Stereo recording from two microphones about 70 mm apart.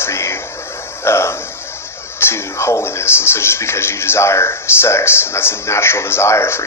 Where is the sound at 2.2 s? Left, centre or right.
Left.